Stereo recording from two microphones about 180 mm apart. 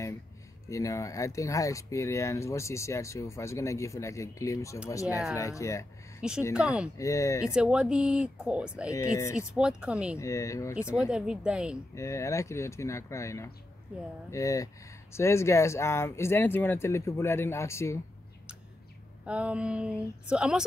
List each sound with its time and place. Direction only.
0.7 s speech: 20° left (ahead or behind)
6.5 s speech: 5° right (ahead or behind)
7.0 s speech: 15° left (ahead or behind)
7.4 s speech: 5° right (ahead or behind)
8.9 s speech: 15° left (ahead or behind)
9.5 s speech: 5° right (ahead or behind)
10.1 s speech: 15° left (ahead or behind)
11.1 s speech: 5° right (ahead or behind)
11.9 s speech: 15° left (ahead or behind)
19.2 s speech: 5° right (ahead or behind)